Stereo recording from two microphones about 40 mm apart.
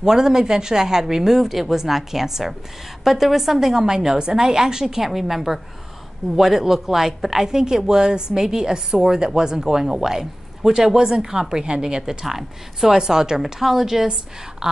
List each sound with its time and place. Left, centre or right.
0.0 s a woman's voice: centre